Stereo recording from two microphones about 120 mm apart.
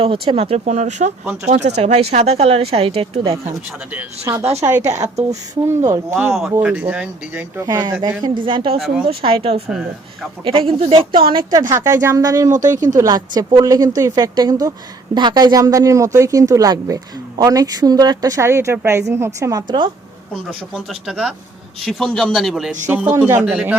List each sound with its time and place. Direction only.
0.0 s speech: 50° right (ahead or behind)
3.9 s speech: 25° right (ahead or behind)
6.6 s speech: 10° right (ahead or behind)
7.6 s speech: 30° right (ahead or behind)
8.2 s speech: 45° right (ahead or behind)
11.7 s a woman's voice: 25° right (ahead or behind)
21.1 s speech: 5° right (ahead or behind)
22.9 s speech: 15° right (ahead or behind)